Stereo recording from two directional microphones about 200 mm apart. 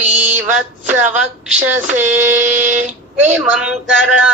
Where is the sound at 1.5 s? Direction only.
10° right (ahead or behind).